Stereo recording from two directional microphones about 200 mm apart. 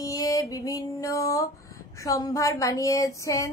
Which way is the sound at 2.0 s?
15° left (ahead or behind).